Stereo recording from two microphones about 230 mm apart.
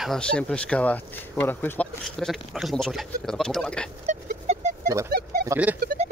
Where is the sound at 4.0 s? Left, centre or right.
Right.